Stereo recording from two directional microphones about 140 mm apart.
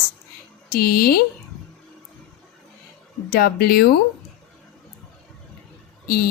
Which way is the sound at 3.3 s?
90° left.